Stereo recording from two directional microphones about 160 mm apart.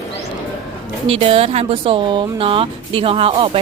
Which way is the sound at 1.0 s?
40° right (ahead or behind).